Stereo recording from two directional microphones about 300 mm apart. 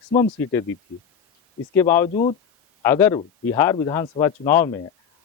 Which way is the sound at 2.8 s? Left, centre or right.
Centre.